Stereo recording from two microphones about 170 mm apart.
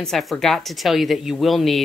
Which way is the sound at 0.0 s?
Centre (ahead or behind).